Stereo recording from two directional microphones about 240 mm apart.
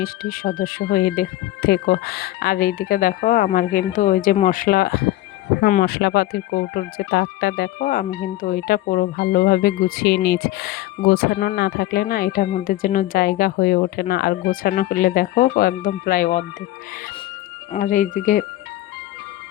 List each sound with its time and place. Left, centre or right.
0.0 s speech: left
17.7 s speech: left